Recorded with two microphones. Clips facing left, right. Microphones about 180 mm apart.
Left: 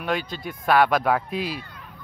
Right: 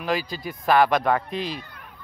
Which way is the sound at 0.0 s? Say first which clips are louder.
Right 1 dB; centre (ahead or behind).